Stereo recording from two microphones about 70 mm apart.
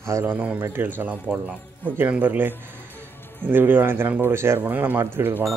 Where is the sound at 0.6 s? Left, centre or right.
Right.